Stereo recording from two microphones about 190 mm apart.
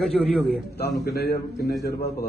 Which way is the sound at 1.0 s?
55° left (ahead or behind).